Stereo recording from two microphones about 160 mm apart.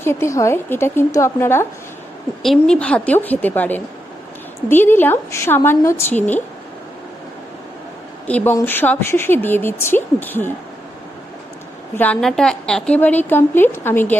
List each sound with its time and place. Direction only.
0.0 s a woman's voice: 15° left (ahead or behind)
2.4 s a woman's voice: 5° left (ahead or behind)
8.3 s a woman's voice: 10° left (ahead or behind)
11.9 s a woman's voice: 10° left (ahead or behind)